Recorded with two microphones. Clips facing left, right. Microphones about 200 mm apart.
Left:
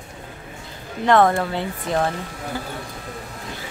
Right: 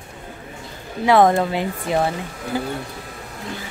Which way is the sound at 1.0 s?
10° right (ahead or behind).